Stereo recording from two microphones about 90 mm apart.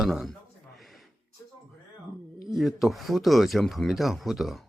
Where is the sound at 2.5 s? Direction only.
Centre (ahead or behind).